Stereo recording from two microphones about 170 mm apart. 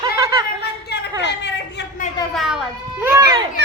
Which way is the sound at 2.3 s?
5° right (ahead or behind).